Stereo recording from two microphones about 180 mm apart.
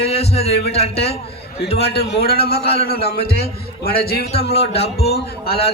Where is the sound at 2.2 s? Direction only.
60° left (ahead or behind).